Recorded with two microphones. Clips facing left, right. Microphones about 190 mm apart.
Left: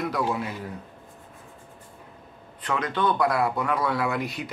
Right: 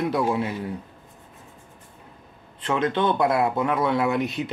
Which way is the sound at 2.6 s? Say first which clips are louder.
Right 4 dB; 25° right (ahead or behind).